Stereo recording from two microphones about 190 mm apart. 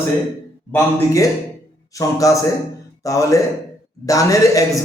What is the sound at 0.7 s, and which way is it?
A man's voice, 15° left (ahead or behind).